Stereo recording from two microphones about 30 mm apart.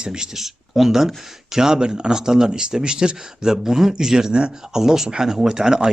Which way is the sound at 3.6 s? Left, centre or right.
Centre.